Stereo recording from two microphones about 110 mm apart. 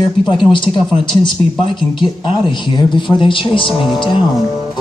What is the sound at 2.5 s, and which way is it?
A man's voice, 45° left (ahead or behind).